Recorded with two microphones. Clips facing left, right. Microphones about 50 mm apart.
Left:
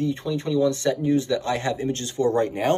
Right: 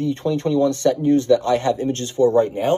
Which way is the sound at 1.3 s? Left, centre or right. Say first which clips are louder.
Right 7 dB; left.